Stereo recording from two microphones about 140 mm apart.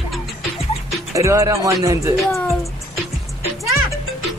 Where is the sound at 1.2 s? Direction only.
20° right (ahead or behind).